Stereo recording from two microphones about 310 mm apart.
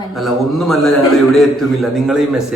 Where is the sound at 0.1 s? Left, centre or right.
Centre.